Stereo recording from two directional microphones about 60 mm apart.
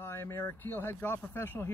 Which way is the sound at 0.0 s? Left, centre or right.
Left.